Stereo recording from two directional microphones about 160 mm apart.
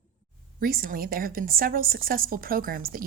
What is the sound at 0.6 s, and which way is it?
A woman's voice, 65° right (ahead or behind).